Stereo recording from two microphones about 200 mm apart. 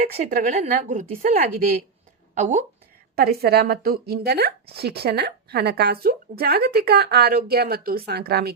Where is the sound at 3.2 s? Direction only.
50° right (ahead or behind).